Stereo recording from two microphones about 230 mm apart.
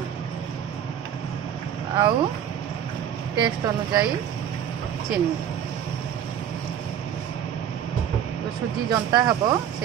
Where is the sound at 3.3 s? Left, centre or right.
Centre.